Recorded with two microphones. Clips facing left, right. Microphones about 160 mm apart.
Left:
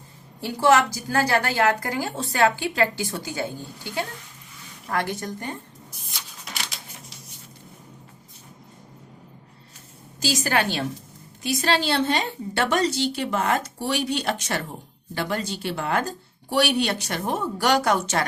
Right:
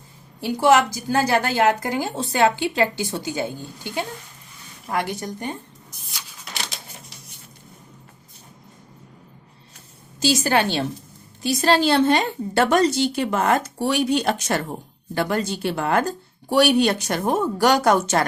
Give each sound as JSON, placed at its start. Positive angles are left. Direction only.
{"t": 0.4, "sound": "a woman's voice", "side_deg": -15}
{"t": 10.2, "sound": "a woman's voice", "side_deg": -30}
{"t": 11.4, "sound": "speech", "side_deg": -40}